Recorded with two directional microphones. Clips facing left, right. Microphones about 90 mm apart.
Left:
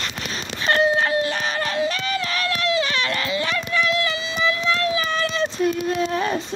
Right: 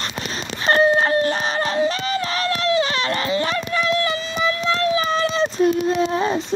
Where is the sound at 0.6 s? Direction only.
35° right (ahead or behind).